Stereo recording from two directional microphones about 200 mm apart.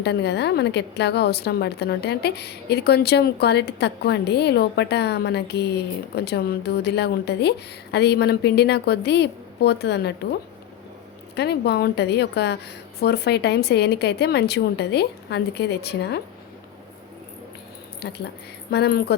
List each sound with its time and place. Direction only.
0.0 s a woman's voice: 55° left (ahead or behind)
11.3 s a woman's voice: 55° left (ahead or behind)
18.0 s a woman's voice: 55° left (ahead or behind)